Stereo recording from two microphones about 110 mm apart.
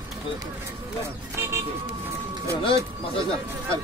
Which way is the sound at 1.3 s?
25° right (ahead or behind).